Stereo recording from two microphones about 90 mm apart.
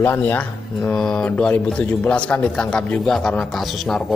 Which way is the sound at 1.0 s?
10° left (ahead or behind).